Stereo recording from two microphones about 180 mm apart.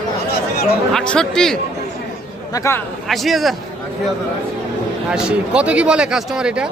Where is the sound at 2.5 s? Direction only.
15° left (ahead or behind).